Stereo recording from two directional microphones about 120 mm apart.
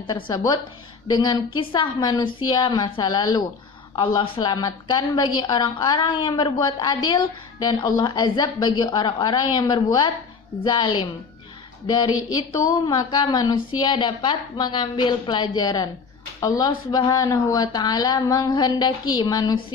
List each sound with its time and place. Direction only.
0.0 s a woman's voice: 35° left (ahead or behind)